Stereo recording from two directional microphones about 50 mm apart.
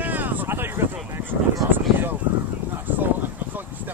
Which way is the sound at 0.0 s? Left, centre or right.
Right.